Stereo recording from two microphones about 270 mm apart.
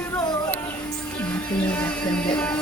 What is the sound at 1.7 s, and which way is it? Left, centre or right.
Music, centre.